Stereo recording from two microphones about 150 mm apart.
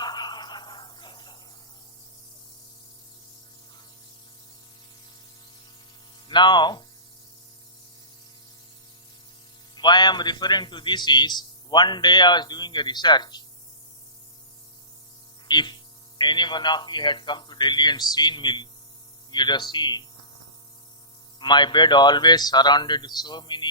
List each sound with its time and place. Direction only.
0.0 s a sound: 30° left (ahead or behind)
6.2 s speech: 30° left (ahead or behind)
9.7 s a man's voice: 30° left (ahead or behind)
15.4 s a man's voice: 30° left (ahead or behind)
21.3 s a man's voice: 30° left (ahead or behind)